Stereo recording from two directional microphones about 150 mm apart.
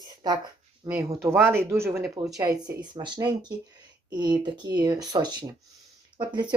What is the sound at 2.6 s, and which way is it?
Speech, 30° right (ahead or behind).